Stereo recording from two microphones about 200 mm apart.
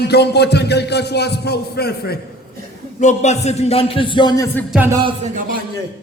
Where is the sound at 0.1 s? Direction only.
55° left (ahead or behind).